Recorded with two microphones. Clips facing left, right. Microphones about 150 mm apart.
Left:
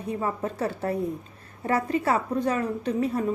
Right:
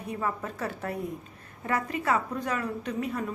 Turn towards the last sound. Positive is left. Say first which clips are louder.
# left 6 dB
turn(degrees=30)  # may be behind; listen again after turning